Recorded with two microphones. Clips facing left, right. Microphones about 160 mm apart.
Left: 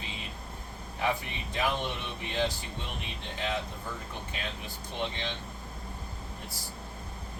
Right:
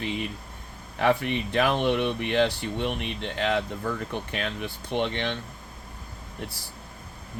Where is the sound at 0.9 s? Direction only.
70° right (ahead or behind).